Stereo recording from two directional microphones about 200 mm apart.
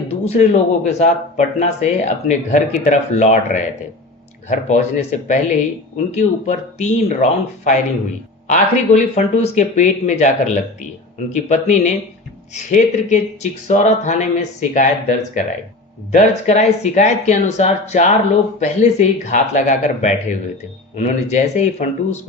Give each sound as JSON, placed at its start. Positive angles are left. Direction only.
{"t": 0.1, "sound": "speech", "side_deg": 35}